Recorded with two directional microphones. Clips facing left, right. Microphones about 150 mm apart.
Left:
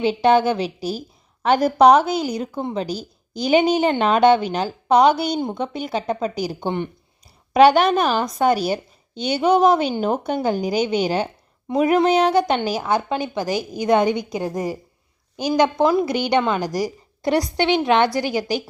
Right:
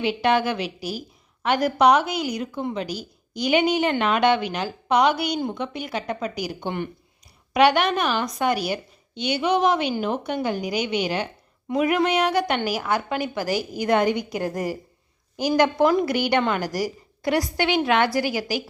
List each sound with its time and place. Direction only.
0.0 s a woman's voice: 30° left (ahead or behind)